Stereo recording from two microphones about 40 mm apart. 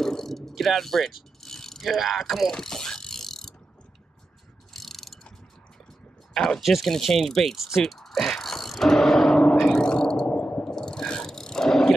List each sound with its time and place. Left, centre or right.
0.0 s pulleys: centre
2.5 s pulleys: centre
4.7 s mechanisms: centre
6.3 s speech: centre
6.6 s speech: centre
7.5 s speech: centre
7.8 s mechanisms: centre
9.8 s a sound: centre
10.3 s a sound: left
10.6 s a sound: centre